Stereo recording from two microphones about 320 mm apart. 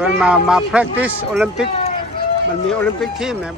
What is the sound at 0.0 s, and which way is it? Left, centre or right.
A man's voice, centre.